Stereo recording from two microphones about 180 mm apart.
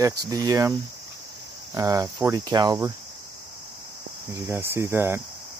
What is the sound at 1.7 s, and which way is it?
Speech, 20° right (ahead or behind).